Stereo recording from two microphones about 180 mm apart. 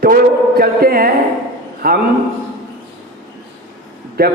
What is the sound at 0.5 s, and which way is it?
A man's voice, 55° right (ahead or behind).